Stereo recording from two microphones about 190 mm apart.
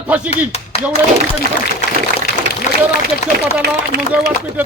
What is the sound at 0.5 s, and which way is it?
Clapping, 35° left (ahead or behind).